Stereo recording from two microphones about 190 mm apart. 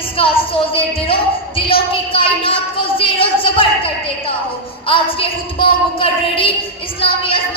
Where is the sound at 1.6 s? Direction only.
30° left (ahead or behind).